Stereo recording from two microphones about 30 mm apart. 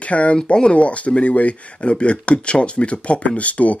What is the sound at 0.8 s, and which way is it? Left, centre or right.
Speech, left.